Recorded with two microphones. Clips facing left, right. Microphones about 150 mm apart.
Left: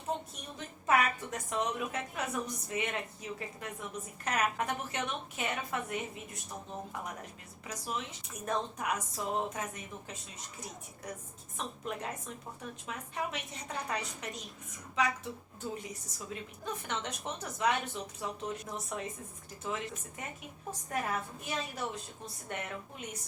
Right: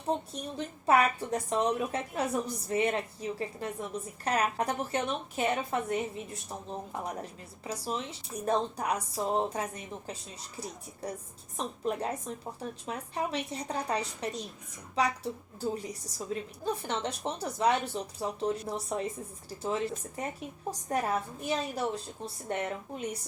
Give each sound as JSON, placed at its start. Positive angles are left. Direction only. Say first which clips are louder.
{"t": 0.1, "sound": "a woman's voice", "louder": "right 6 dB", "side_deg": -35}
{"t": 11.0, "sound": "a woman's voice", "louder": "right 6 dB", "side_deg": -35}